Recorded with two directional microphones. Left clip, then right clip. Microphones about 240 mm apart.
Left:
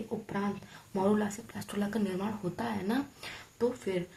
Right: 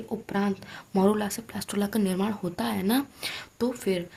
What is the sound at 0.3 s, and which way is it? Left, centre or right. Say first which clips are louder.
Speech: right 6 dB; right.